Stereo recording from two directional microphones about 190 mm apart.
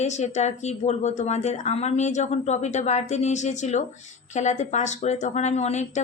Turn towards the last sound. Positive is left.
turn(degrees=35)  # may be behind; listen again after turning